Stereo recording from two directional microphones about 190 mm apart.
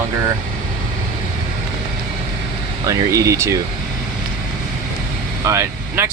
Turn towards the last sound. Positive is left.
turn(degrees=-15)  # may be behind; listen again after turning